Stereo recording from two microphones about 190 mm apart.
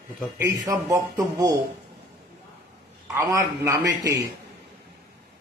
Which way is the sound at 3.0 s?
15° right (ahead or behind).